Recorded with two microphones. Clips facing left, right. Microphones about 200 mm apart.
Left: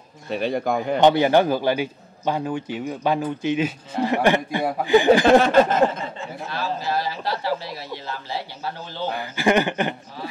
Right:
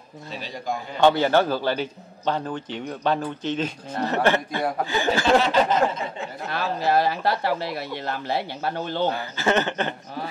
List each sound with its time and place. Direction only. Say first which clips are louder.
0.3 s speech: left 8 dB; 60° left (ahead or behind)
1.0 s speech: left 2 dB; 15° left (ahead or behind)
5.4 s a sound: left 4 dB; 50° left (ahead or behind)
6.5 s speech: right 4 dB; 60° right (ahead or behind)
9.1 s speech: left 3 dB; 15° left (ahead or behind)